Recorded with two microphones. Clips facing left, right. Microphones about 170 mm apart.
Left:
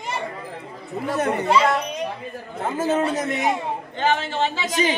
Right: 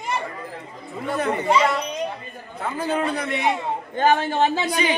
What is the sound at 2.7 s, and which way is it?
Speech, 45° left (ahead or behind).